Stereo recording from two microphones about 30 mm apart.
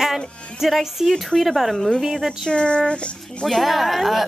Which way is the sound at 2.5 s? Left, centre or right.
Left.